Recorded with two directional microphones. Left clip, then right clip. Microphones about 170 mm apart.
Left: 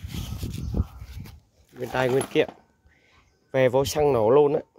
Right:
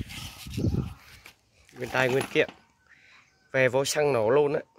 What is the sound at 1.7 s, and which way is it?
Speech, 20° left (ahead or behind).